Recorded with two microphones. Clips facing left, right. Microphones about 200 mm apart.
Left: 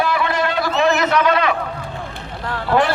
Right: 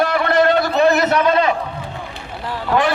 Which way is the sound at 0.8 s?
35° right (ahead or behind).